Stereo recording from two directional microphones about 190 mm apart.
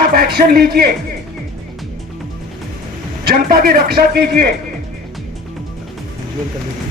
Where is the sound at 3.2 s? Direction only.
50° right (ahead or behind).